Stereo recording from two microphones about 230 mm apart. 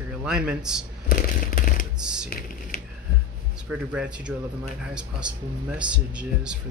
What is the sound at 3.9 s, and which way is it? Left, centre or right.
Speech, centre.